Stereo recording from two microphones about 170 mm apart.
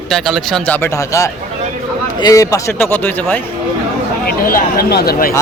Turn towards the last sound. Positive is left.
turn(degrees=70)  # may be behind; listen again after turning